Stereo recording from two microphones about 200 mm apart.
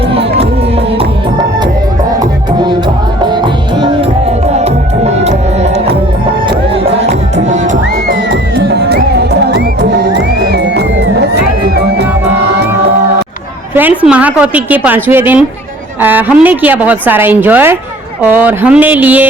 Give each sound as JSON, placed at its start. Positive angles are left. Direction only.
{"t": 0.1, "sound": "music", "side_deg": -30}
{"t": 3.2, "sound": "music", "side_deg": -20}
{"t": 5.2, "sound": "music", "side_deg": -35}
{"t": 7.4, "sound": "music", "side_deg": -35}
{"t": 8.9, "sound": "music", "side_deg": -55}
{"t": 13.7, "sound": "a woman's voice", "side_deg": -10}